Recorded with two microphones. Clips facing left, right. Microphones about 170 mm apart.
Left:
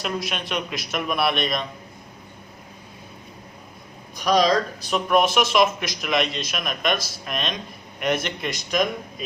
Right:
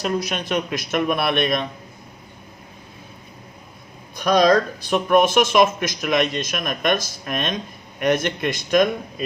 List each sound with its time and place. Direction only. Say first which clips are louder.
0.0 s speech: right 4 dB; 40° right (ahead or behind)
4.2 s speech: right 3 dB; 55° right (ahead or behind)